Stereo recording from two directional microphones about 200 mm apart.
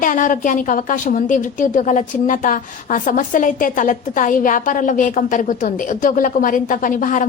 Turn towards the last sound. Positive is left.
turn(degrees=40)  # may be behind; listen again after turning